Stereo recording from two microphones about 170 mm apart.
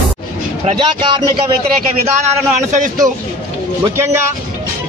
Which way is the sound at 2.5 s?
45° right (ahead or behind).